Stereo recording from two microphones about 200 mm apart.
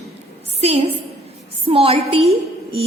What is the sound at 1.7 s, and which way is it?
A woman's voice, 30° right (ahead or behind).